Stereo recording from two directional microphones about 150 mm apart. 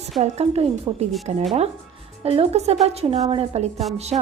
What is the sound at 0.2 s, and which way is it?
A woman's voice, 45° right (ahead or behind).